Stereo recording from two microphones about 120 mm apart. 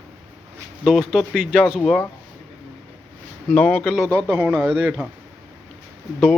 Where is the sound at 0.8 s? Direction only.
5° right (ahead or behind).